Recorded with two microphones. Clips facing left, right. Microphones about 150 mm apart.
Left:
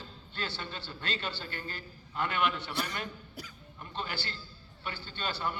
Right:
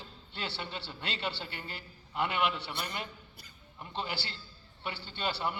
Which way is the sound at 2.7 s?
90° left.